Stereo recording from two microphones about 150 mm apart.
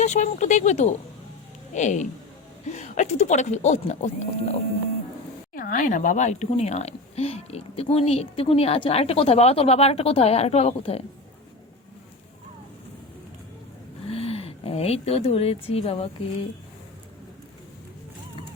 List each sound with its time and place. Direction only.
0.0 s a woman's voice: 50° left (ahead or behind)
5.5 s a woman's voice: 70° left (ahead or behind); by 11.0 s 45° left (ahead or behind)
14.1 s speech: 40° left (ahead or behind)